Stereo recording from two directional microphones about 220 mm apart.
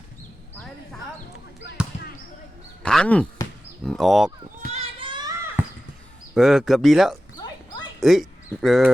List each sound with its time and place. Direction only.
2.8 s speech: 5° left (ahead or behind)
4.7 s children playing: 25° right (ahead or behind)
5.6 s basketball bounce: 10° right (ahead or behind)
6.3 s speech: centre (ahead or behind)